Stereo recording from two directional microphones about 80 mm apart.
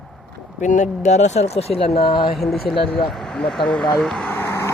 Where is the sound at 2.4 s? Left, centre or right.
Centre.